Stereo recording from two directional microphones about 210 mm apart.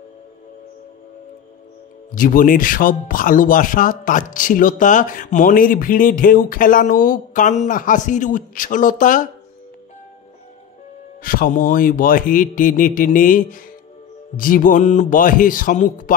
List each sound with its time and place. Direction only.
2.1 s speech: 40° left (ahead or behind)
11.2 s speech: 45° left (ahead or behind)